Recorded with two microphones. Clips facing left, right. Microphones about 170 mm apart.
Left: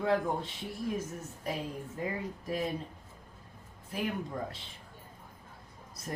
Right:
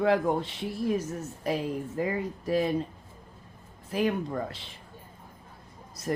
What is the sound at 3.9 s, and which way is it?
Speech, 85° right.